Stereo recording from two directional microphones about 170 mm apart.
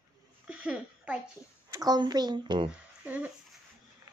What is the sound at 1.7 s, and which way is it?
Speech, 25° right (ahead or behind).